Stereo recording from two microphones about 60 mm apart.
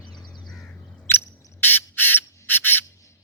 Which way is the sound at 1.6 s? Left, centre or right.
Left.